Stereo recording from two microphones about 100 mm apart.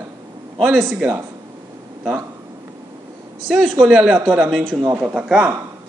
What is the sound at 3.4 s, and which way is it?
A man's voice, 5° left (ahead or behind).